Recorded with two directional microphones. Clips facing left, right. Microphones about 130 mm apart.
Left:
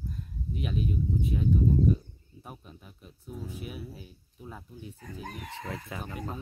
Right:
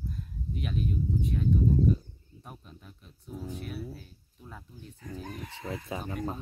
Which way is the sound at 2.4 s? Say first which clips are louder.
Left 1 dB; 5° left (ahead or behind).